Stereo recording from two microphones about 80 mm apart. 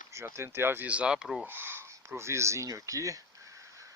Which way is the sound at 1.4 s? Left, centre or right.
Right.